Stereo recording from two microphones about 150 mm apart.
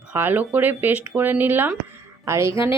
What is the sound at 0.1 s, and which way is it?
A woman's voice, 10° right (ahead or behind).